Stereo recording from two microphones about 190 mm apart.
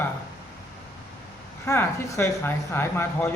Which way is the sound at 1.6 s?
10° left (ahead or behind).